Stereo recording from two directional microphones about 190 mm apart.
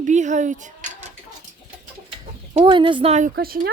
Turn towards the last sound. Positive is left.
turn(degrees=-50)  # may be behind; listen again after turning